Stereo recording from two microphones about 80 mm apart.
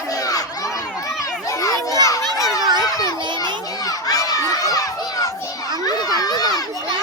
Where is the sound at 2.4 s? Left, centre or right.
Left.